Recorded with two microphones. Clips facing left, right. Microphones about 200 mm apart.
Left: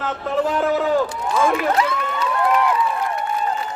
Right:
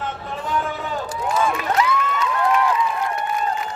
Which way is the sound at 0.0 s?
65° left (ahead or behind).